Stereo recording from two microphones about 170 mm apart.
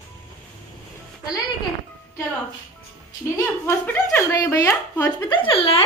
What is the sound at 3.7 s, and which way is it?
Speech, 15° left (ahead or behind).